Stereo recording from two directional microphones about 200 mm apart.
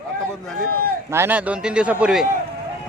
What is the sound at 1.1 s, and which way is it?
A man's voice, 10° right (ahead or behind).